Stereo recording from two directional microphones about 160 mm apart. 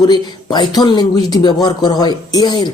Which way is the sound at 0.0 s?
25° left (ahead or behind).